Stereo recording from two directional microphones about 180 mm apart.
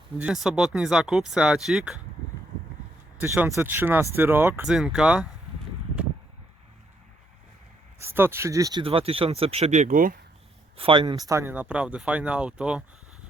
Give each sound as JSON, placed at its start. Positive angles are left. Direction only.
{"t": 0.2, "sound": "speech", "side_deg": -5}
{"t": 3.2, "sound": "speech", "side_deg": -10}
{"t": 4.7, "sound": "speech", "side_deg": 0}
{"t": 8.0, "sound": "speech", "side_deg": -10}
{"t": 8.8, "sound": "speech", "side_deg": -30}
{"t": 10.8, "sound": "speech", "side_deg": -30}